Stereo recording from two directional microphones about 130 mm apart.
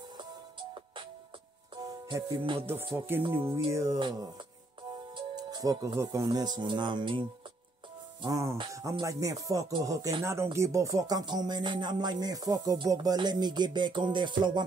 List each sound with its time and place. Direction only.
0.2 s music: 40° right (ahead or behind)
2.3 s speech: 40° right (ahead or behind)
3.3 s music: 20° right (ahead or behind)
5.1 s speech: 35° right (ahead or behind)
8.3 s music: 25° right (ahead or behind)
10.2 s speech: 20° right (ahead or behind)